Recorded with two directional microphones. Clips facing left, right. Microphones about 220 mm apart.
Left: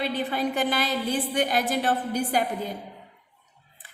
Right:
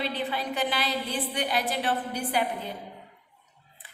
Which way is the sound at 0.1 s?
45° left (ahead or behind).